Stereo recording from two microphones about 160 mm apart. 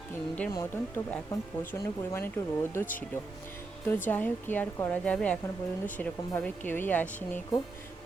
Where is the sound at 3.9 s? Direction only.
10° left (ahead or behind).